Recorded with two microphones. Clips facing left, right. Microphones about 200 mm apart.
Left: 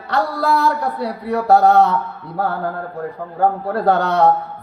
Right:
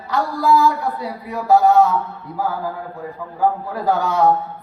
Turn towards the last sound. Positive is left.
turn(degrees=65)  # may be behind; listen again after turning